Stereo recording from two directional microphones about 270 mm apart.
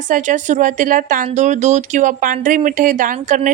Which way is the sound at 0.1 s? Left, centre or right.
Right.